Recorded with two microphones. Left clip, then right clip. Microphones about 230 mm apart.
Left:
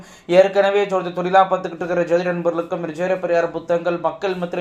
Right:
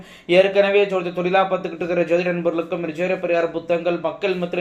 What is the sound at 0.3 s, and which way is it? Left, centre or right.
A man's voice, centre.